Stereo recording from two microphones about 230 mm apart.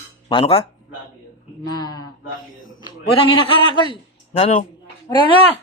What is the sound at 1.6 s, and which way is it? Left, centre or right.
A man's voice, centre.